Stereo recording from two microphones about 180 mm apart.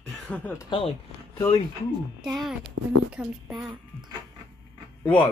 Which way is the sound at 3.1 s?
5° right (ahead or behind).